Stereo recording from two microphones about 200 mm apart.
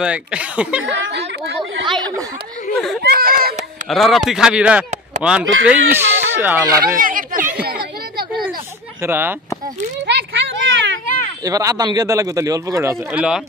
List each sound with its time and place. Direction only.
0.0 s speech: 5° right (ahead or behind)
1.1 s chatter: 55° right (ahead or behind)
1.9 s chatter: 20° right (ahead or behind)
3.0 s a sound: 50° right (ahead or behind)
3.9 s a man's voice: centre (ahead or behind)
7.0 s chatter: 45° right (ahead or behind)
9.0 s a man's voice: 10° right (ahead or behind)
10.0 s a sound: 60° right (ahead or behind)
11.4 s a man's voice: 15° right (ahead or behind)